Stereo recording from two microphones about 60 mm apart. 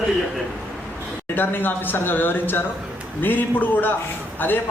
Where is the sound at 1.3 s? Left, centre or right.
Left.